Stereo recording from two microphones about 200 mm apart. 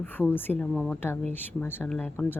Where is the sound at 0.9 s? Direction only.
10° left (ahead or behind).